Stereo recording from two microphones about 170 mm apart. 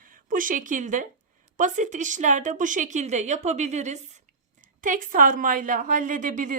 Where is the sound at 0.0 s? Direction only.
55° right (ahead or behind).